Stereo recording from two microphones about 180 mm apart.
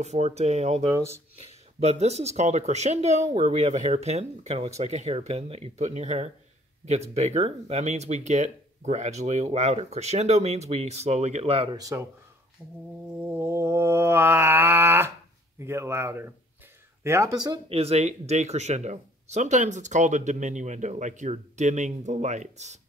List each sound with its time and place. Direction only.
0.0 s speech: 40° right (ahead or behind)
0.9 s speech: 15° right (ahead or behind)
1.3 s speech: 35° right (ahead or behind); by 12.1 s 20° right (ahead or behind)
13.3 s mantra: 15° right (ahead or behind)
15.6 s speech: 15° right (ahead or behind)
17.6 s speech: 35° right (ahead or behind)